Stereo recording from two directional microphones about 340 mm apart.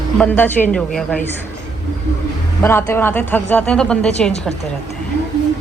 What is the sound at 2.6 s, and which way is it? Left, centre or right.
Speech, centre.